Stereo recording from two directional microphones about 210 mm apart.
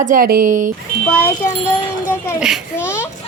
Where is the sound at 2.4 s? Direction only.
Centre (ahead or behind).